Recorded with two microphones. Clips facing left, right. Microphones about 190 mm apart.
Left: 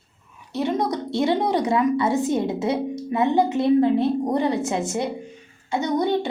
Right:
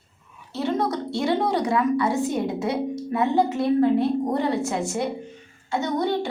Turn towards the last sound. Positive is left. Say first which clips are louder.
# left 2 dB
turn(degrees=20)  # may be behind; listen again after turning